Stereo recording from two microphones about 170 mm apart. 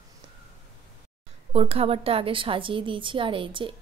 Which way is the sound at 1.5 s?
35° right (ahead or behind).